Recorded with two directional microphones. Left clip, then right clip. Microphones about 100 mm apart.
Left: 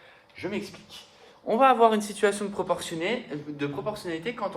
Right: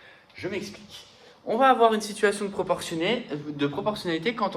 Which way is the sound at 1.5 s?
75° left (ahead or behind).